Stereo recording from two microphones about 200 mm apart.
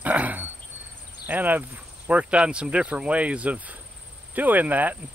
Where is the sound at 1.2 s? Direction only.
10° right (ahead or behind).